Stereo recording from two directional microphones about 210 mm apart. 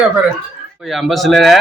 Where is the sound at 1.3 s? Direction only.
Centre (ahead or behind).